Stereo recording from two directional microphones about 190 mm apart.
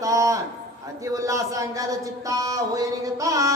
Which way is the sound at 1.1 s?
15° right (ahead or behind).